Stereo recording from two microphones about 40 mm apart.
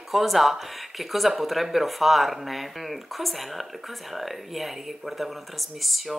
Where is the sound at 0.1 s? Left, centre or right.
Centre.